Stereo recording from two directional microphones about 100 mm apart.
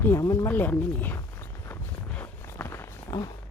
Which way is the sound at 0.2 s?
30° left (ahead or behind).